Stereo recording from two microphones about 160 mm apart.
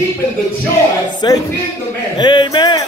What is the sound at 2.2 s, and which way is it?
Speech, 30° left (ahead or behind).